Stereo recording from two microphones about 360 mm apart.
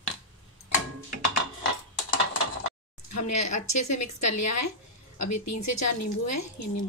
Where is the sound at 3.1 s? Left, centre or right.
Left.